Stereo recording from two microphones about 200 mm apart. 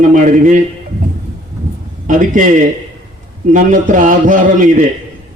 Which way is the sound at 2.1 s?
40° right (ahead or behind).